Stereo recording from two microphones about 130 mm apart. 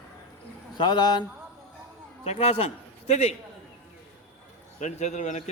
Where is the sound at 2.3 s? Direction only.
50° left (ahead or behind).